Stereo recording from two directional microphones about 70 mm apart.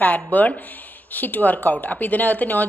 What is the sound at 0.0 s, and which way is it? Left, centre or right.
A woman's voice, left.